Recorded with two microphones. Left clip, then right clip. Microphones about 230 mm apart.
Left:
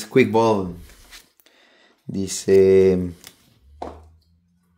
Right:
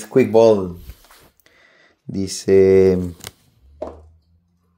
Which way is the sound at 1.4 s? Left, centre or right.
Centre.